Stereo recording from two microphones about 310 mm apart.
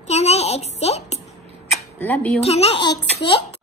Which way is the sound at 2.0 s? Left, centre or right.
Centre.